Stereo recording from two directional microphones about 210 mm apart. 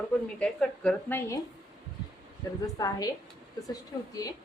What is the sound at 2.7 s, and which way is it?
A woman's voice, 15° left (ahead or behind).